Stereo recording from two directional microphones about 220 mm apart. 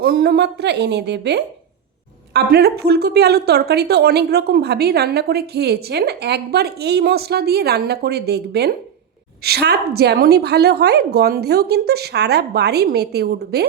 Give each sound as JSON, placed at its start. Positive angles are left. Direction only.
{"t": 0.0, "sound": "a woman's voice", "side_deg": -45}